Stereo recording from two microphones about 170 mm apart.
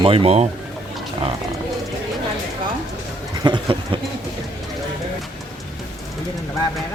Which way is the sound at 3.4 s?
30° right (ahead or behind).